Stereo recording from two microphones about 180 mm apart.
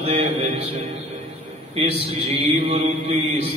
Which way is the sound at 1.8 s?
30° right (ahead or behind).